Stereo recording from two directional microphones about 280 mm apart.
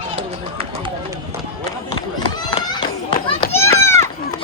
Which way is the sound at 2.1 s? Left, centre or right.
Centre.